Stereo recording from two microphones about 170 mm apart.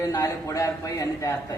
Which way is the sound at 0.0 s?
20° left (ahead or behind).